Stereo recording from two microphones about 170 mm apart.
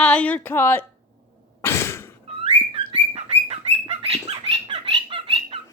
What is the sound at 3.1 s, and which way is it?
Bird, 35° right (ahead or behind).